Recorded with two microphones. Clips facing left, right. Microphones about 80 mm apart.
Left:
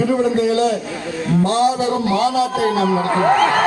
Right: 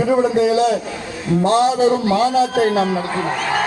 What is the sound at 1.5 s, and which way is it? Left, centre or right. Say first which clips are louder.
Speech: right 5 dB; right.